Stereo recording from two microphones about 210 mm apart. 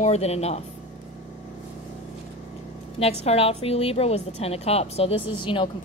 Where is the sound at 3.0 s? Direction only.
30° left (ahead or behind).